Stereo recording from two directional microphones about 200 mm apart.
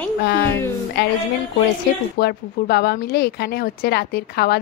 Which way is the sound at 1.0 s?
55° left (ahead or behind).